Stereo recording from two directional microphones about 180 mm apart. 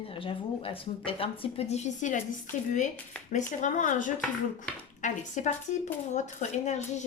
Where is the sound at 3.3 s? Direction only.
45° left (ahead or behind).